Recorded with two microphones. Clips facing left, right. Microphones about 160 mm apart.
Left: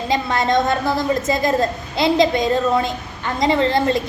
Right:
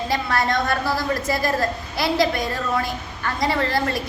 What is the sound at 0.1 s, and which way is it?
A woman's voice, 20° left (ahead or behind).